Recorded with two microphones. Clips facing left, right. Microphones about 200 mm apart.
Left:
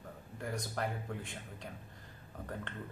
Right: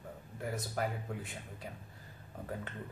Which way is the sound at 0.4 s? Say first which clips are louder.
Right 1 dB; 5° right (ahead or behind).